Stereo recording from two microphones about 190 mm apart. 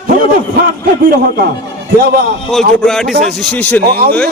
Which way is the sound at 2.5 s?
Centre (ahead or behind).